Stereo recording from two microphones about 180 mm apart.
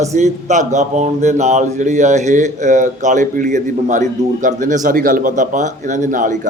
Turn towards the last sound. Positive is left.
turn(degrees=-45)  # may be behind; listen again after turning